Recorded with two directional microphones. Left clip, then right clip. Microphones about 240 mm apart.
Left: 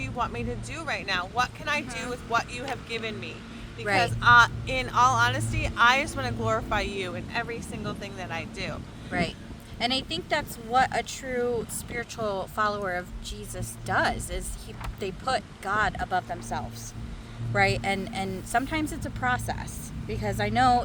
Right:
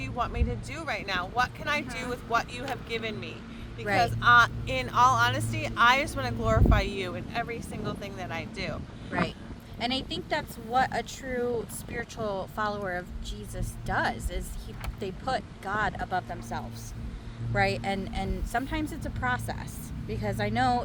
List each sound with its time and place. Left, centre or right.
0.0 s speech: centre
9.1 s a woman's voice: left